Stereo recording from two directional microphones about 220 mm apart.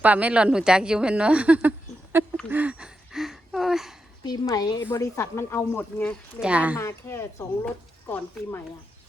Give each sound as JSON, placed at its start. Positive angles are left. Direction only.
{"t": 0.0, "sound": "a woman's voice", "side_deg": -5}
{"t": 2.5, "sound": "a sound", "side_deg": -5}
{"t": 4.2, "sound": "speech", "side_deg": 15}
{"t": 6.4, "sound": "speech", "side_deg": -5}
{"t": 6.7, "sound": "speech", "side_deg": 10}